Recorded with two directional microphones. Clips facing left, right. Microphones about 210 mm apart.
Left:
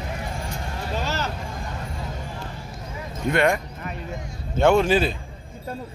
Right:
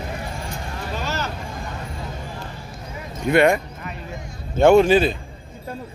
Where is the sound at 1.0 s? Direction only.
30° left (ahead or behind).